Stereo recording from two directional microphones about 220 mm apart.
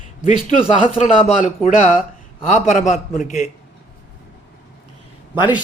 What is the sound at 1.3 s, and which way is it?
Speech, 30° left (ahead or behind).